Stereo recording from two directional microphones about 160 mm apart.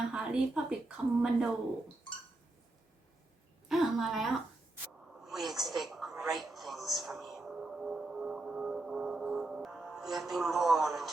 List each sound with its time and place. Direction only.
0.1 s speech: 5° right (ahead or behind)
3.7 s a woman's voice: centre (ahead or behind)
5.2 s a sound: centre (ahead or behind)
6.2 s music: centre (ahead or behind)